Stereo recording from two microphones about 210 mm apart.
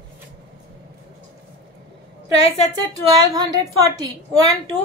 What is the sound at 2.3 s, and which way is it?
Speech, 30° left (ahead or behind).